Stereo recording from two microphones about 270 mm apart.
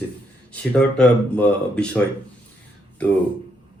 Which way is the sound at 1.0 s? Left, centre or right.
Centre.